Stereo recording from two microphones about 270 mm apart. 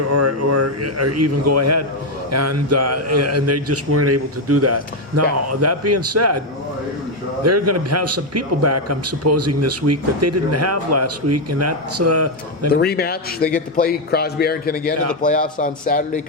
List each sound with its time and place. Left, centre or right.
0.1 s a man's voice: right
7.4 s a man's voice: right
12.7 s a man's voice: left